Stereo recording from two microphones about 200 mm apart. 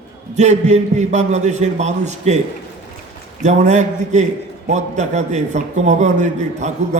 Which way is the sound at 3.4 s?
35° right (ahead or behind).